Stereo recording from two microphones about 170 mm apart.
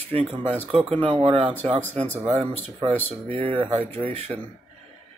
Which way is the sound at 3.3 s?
35° right (ahead or behind).